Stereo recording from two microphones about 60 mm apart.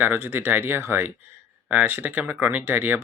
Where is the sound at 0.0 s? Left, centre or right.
Right.